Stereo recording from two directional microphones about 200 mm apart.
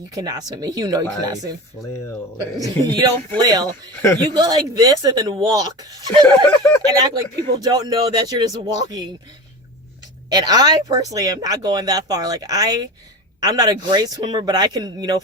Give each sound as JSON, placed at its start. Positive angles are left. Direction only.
{"t": 0.1, "sound": "speech", "side_deg": -20}
{"t": 2.6, "sound": "speech", "side_deg": -20}
{"t": 10.3, "sound": "speech", "side_deg": -20}